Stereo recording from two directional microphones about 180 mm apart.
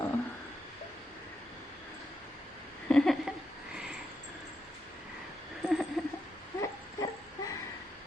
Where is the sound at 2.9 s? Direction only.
5° left (ahead or behind).